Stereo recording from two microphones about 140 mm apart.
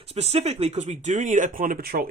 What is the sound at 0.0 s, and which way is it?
Speech, 50° right (ahead or behind).